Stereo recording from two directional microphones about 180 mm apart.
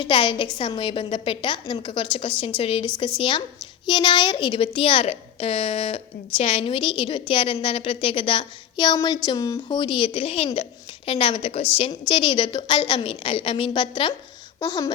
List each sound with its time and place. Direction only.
0.0 s a woman's voice: 25° left (ahead or behind)